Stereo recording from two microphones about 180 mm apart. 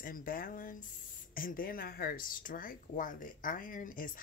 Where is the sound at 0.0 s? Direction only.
50° left (ahead or behind).